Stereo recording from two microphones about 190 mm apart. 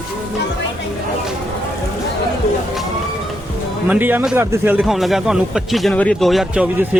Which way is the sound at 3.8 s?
10° right (ahead or behind).